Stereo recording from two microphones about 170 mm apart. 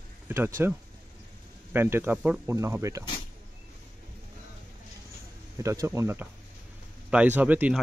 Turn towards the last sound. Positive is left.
turn(degrees=-10)  # may be behind; listen again after turning